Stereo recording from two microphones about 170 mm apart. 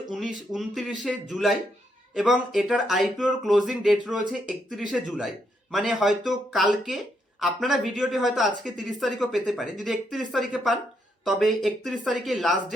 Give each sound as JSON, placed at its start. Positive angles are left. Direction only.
{"t": 0.1, "sound": "speech", "side_deg": 0}